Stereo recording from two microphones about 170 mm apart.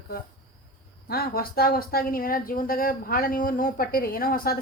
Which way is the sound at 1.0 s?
65° left (ahead or behind).